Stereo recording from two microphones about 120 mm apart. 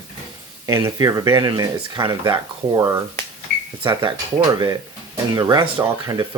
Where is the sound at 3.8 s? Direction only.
45° right (ahead or behind).